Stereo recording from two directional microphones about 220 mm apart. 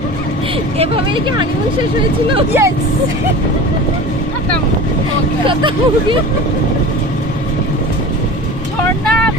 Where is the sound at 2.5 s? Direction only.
10° right (ahead or behind).